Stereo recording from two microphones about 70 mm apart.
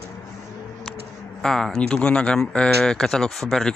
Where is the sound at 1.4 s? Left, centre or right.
Centre.